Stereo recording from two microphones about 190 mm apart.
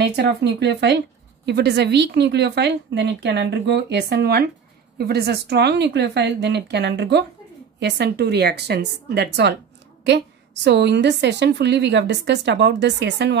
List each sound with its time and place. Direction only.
0.0 s a woman's voice: 65° right (ahead or behind)